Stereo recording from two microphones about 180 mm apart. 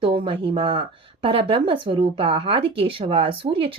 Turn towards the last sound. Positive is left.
turn(degrees=-30)  # may be behind; listen again after turning